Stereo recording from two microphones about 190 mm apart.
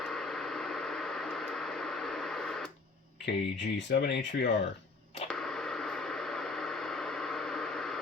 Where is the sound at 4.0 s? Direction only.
65° left (ahead or behind).